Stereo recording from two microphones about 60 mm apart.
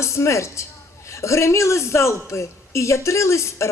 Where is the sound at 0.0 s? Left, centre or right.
Left.